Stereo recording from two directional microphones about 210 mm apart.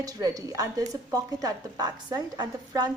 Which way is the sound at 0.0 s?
15° right (ahead or behind).